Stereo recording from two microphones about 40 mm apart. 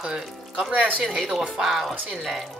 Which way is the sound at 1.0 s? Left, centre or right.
Centre.